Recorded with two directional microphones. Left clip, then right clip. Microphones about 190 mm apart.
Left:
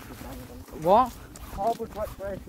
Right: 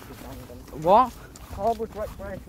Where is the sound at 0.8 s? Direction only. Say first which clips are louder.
Right 2 dB; 25° right (ahead or behind).